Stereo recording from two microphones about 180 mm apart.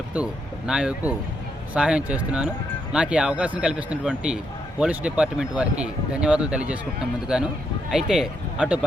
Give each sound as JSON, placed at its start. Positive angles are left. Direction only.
{"t": 0.7, "sound": "speech", "side_deg": -5}